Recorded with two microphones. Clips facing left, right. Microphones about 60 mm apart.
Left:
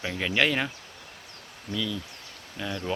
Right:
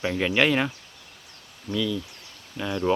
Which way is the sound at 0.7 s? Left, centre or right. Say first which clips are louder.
Right 1 dB; left.